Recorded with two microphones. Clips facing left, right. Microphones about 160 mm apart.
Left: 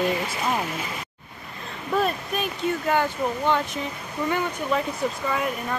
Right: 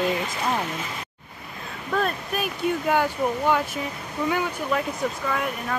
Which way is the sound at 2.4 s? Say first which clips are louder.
Right 2 dB; 10° right (ahead or behind).